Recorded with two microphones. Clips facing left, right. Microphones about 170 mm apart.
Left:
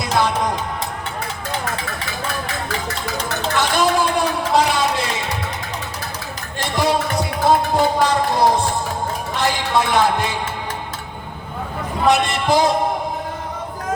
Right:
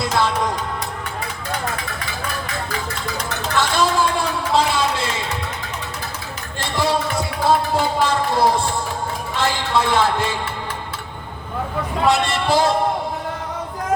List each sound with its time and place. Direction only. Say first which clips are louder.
0.0 s music: left 1 dB; 15° left (ahead or behind)
3.5 s a sound: left 1 dB; 15° left (ahead or behind)
6.6 s music: left 2 dB; 15° left (ahead or behind)
12.0 s a man's voice: left 2 dB; 20° left (ahead or behind)